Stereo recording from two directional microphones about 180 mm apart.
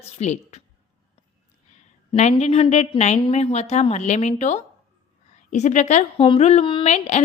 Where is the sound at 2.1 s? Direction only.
40° left (ahead or behind).